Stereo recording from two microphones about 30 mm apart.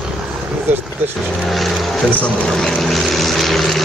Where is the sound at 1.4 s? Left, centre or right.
Centre.